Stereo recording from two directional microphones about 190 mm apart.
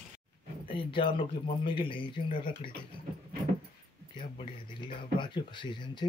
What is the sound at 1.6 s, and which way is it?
Speech, 25° left (ahead or behind).